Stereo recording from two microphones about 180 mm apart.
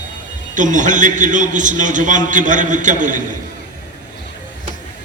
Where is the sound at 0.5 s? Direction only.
45° right (ahead or behind).